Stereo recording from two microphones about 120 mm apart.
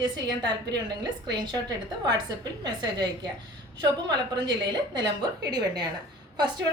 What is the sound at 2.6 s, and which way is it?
Speech, 35° right (ahead or behind).